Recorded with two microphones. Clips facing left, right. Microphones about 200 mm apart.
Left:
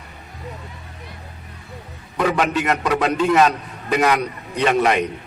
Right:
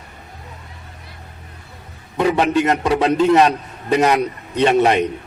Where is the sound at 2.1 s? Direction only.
25° right (ahead or behind).